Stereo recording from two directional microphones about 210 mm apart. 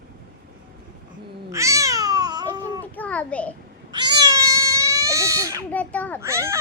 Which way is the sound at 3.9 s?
20° right (ahead or behind).